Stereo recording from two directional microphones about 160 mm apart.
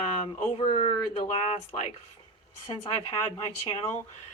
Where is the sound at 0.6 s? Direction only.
40° left (ahead or behind).